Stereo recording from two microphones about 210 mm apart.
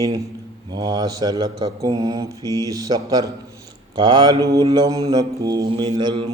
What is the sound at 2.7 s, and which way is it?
Speech, 15° right (ahead or behind).